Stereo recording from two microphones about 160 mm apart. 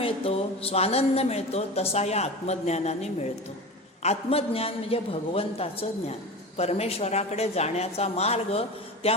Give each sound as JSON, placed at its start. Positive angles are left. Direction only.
{"t": 0.0, "sound": "speech", "side_deg": 35}